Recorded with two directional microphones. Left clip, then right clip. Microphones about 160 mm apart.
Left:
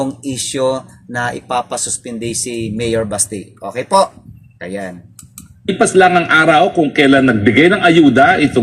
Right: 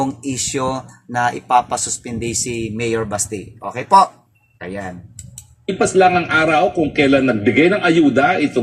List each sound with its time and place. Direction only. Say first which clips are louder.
0.0 s speech: left 1 dB; 25° right (ahead or behind)
5.6 s a man's voice: left 3 dB; 25° left (ahead or behind)